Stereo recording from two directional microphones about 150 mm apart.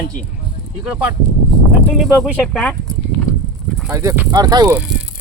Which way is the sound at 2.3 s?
5° left (ahead or behind).